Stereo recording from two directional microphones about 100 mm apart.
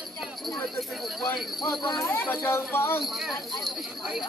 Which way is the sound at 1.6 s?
45° left (ahead or behind).